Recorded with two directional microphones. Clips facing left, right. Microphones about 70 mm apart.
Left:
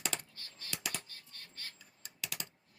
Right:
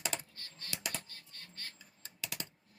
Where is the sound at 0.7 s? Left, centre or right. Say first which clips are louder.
Even; right.